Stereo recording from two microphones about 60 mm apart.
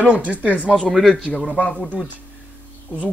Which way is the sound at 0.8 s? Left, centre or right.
Centre.